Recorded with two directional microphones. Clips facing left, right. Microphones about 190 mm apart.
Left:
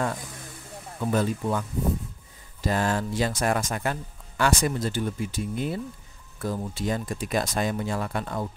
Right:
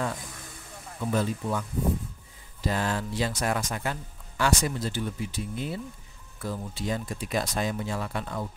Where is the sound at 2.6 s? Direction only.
45° left (ahead or behind).